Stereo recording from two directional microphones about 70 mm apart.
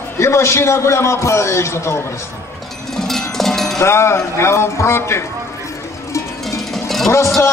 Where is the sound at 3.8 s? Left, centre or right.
Left.